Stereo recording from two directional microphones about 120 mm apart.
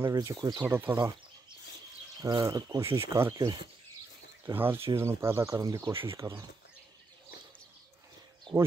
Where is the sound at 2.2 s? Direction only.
35° right (ahead or behind).